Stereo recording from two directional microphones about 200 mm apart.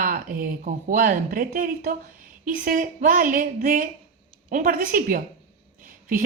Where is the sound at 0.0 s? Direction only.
45° right (ahead or behind).